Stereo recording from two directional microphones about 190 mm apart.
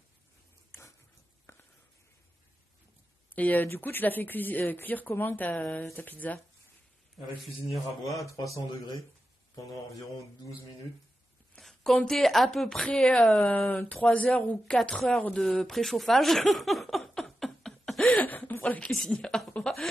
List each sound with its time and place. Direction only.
0.7 s a sound: 15° left (ahead or behind)
3.3 s speech: 10° left (ahead or behind)
8.4 s speech: 20° left (ahead or behind)
9.7 s speech: 15° left (ahead or behind)
11.5 s speech: centre (ahead or behind)